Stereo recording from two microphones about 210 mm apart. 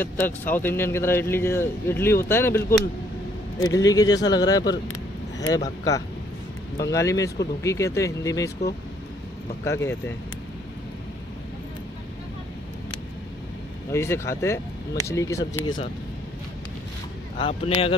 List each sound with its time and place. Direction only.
0.0 s speech: 10° left (ahead or behind)
9.7 s speech: 10° left (ahead or behind)
13.9 s speech: 10° left (ahead or behind)
17.4 s speech: 25° left (ahead or behind)